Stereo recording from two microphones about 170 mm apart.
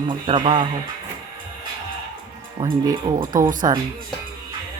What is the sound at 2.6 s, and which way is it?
Speech, 20° right (ahead or behind).